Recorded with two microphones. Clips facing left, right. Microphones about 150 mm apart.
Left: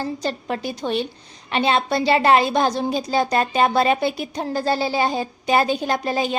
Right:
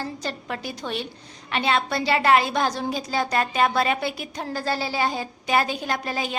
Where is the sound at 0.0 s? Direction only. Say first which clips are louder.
Left 5 dB; 25° left (ahead or behind).